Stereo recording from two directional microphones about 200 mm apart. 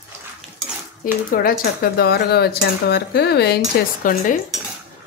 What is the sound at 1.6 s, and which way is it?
Speech, 50° left (ahead or behind).